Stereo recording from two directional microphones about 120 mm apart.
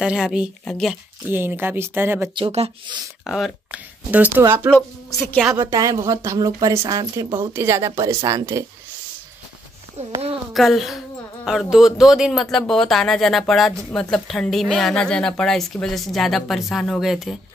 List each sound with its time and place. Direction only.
0.0 s speech: 5° right (ahead or behind)
1.3 s speech: 15° right (ahead or behind)
2.3 s speech: 55° right (ahead or behind)
3.3 s speech: 5° right (ahead or behind)
4.7 s a woman's voice: 15° left (ahead or behind)
5.6 s speech: 25° right (ahead or behind)
9.9 s speech: 60° right (ahead or behind)
10.5 s speech: centre (ahead or behind)